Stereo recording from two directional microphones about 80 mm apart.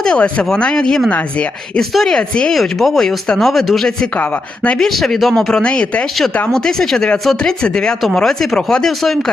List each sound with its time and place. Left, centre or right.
0.0 s speech: centre
1.8 s speech: centre
4.2 s speech: centre
4.8 s speech: centre